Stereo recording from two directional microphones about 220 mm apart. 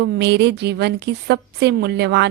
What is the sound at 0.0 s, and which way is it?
A woman's voice, 50° right (ahead or behind).